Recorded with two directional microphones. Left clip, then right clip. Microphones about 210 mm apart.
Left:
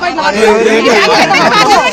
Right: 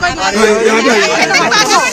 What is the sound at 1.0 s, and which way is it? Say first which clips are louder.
Speech: left 3 dB; 40° right (ahead or behind).